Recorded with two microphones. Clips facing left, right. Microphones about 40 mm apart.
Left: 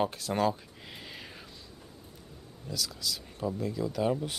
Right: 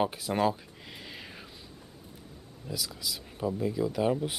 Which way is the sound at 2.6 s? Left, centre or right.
Centre.